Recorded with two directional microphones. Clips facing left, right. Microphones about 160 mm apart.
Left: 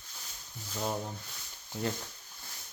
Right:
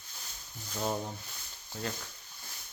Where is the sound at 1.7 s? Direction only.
20° left (ahead or behind).